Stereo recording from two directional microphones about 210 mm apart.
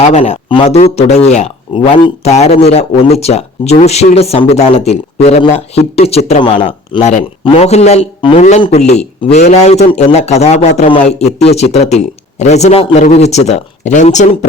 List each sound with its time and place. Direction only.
0.0 s a man's voice: 30° left (ahead or behind)